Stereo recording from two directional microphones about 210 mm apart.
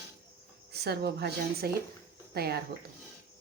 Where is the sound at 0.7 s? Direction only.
50° right (ahead or behind).